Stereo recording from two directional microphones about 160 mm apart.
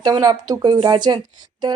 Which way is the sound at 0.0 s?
25° right (ahead or behind).